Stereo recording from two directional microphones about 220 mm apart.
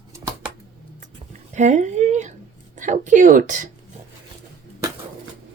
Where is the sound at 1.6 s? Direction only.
30° right (ahead or behind).